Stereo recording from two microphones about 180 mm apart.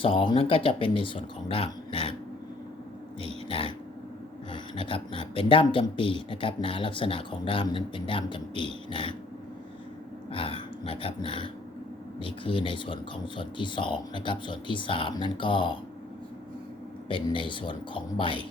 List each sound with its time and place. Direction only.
0.0 s speech: 30° left (ahead or behind)
3.2 s speech: 30° left (ahead or behind)
10.3 s speech: 30° left (ahead or behind)
17.1 s speech: 30° left (ahead or behind)